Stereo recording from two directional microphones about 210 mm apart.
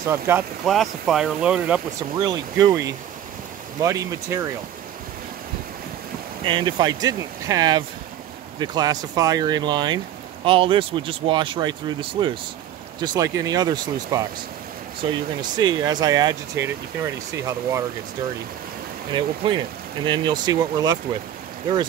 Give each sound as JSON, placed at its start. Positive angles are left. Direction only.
{"t": 0.0, "sound": "speech", "side_deg": -10}
{"t": 0.7, "sound": "speech", "side_deg": 0}
{"t": 2.1, "sound": "speech", "side_deg": -20}
{"t": 6.4, "sound": "speech", "side_deg": -20}
{"t": 19.1, "sound": "speech", "side_deg": -20}